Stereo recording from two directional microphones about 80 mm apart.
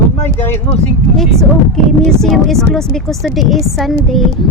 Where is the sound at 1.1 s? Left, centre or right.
Centre.